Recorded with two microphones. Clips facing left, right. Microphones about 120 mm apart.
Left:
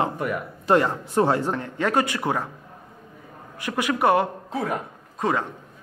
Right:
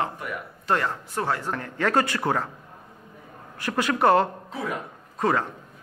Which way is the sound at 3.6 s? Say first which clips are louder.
Even; 15° left (ahead or behind).